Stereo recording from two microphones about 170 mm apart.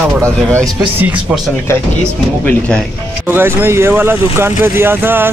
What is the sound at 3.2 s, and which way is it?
Speech, 15° right (ahead or behind).